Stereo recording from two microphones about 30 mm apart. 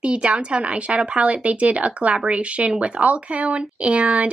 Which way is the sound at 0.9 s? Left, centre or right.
Right.